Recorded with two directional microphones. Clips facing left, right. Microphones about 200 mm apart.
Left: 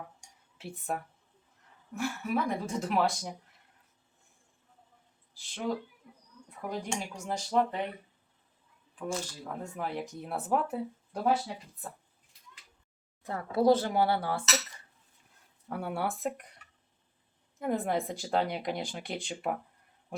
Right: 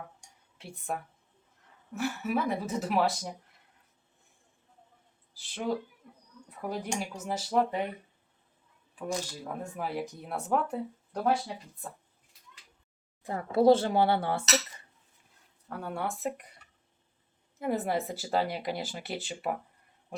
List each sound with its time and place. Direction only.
0.6 s speech: 5° left (ahead or behind)
5.3 s speech: centre (ahead or behind)
9.0 s speech: 15° right (ahead or behind); by 11.3 s 5° left (ahead or behind)
13.2 s speech: 15° right (ahead or behind)
13.6 s speech: 25° right (ahead or behind)
15.7 s speech: 10° left (ahead or behind)
17.6 s speech: 5° right (ahead or behind)